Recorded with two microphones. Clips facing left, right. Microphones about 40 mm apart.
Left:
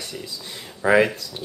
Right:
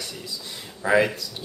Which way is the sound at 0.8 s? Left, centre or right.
Centre.